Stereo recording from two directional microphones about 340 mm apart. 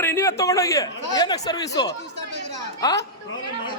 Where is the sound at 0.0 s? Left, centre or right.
Centre.